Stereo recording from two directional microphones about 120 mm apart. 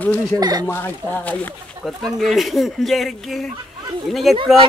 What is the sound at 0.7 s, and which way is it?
Speech, 15° left (ahead or behind).